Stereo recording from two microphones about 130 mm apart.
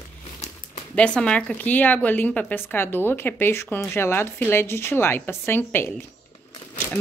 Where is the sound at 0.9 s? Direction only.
10° left (ahead or behind).